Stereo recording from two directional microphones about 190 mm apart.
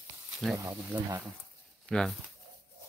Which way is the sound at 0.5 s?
15° right (ahead or behind).